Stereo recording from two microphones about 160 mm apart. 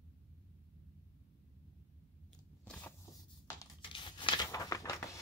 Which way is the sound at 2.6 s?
10° left (ahead or behind).